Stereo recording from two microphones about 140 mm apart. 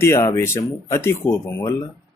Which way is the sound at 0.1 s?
20° left (ahead or behind).